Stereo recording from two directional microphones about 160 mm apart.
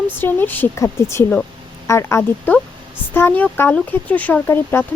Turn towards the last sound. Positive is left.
turn(degrees=15)  # may be behind; listen again after turning